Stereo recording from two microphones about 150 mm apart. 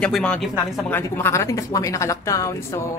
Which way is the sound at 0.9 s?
15° left (ahead or behind).